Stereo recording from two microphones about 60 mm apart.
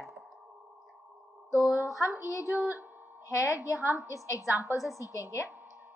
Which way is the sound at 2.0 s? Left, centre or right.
Left.